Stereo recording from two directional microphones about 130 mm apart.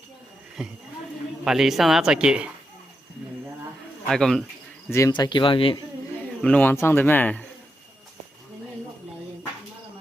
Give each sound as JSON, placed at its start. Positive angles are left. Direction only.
{"t": 0.6, "sound": "speech", "side_deg": -5}
{"t": 4.1, "sound": "speech", "side_deg": 5}
{"t": 4.9, "sound": "speech", "side_deg": 20}
{"t": 5.1, "sound": "speech", "side_deg": 35}
{"t": 6.4, "sound": "speech", "side_deg": 10}